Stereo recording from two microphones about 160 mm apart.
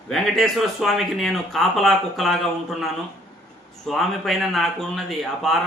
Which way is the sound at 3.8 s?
Centre (ahead or behind).